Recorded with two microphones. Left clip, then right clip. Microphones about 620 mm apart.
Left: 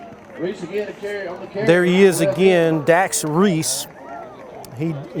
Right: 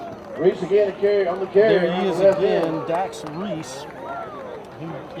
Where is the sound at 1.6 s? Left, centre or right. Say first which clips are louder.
Left 4 dB; left.